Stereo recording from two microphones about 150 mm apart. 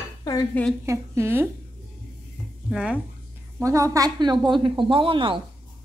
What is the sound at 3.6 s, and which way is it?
A woman's voice, 20° right (ahead or behind).